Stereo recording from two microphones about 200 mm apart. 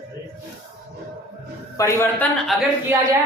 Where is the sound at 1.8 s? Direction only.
10° left (ahead or behind).